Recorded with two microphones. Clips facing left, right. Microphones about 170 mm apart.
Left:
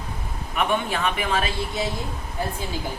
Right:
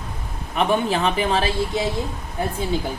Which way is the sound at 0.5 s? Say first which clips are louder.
Right 4 dB; 30° right (ahead or behind).